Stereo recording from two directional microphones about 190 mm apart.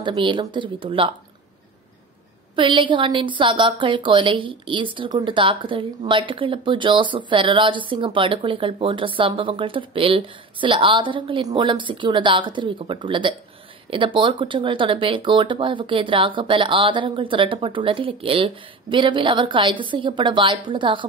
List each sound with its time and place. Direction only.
0.0 s a woman's voice: 25° right (ahead or behind)
2.5 s a woman's voice: 25° right (ahead or behind)